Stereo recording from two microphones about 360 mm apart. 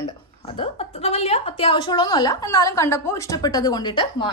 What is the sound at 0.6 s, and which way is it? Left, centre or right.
A woman's voice, centre.